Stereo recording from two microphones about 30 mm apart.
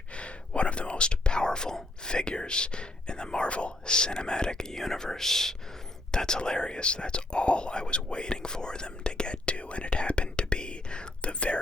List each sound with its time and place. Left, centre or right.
0.2 s whispering: left
3.5 s speech: left
4.7 s speech: centre
6.1 s speech: left